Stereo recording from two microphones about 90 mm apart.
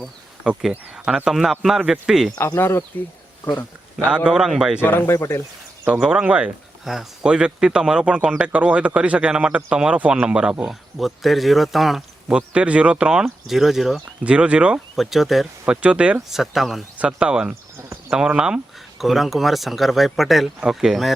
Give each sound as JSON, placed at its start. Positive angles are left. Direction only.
{"t": 0.4, "sound": "speech", "side_deg": -10}
{"t": 2.4, "sound": "speech", "side_deg": 30}
{"t": 4.0, "sound": "speech", "side_deg": -10}
{"t": 4.8, "sound": "speech", "side_deg": 25}
{"t": 6.0, "sound": "speech", "side_deg": -10}
{"t": 14.3, "sound": "speech", "side_deg": -10}
{"t": 14.9, "sound": "speech", "side_deg": 0}